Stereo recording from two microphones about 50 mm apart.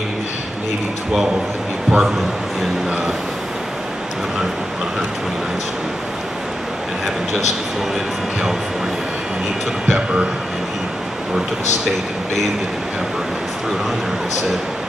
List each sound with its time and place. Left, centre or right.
1.9 s speech: centre
9.8 s speech: right